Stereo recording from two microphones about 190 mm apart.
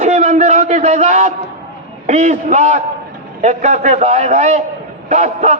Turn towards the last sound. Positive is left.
turn(degrees=-40)  # may be behind; listen again after turning